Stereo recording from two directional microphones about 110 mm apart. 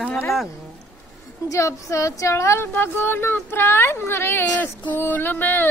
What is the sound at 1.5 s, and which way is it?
Speech, 30° left (ahead or behind).